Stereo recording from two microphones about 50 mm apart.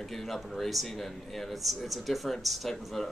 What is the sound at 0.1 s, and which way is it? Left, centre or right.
Speech, centre.